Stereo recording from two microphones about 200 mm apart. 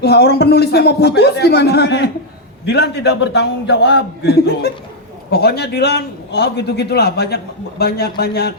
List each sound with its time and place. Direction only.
0.0 s a man's voice: 55° left (ahead or behind)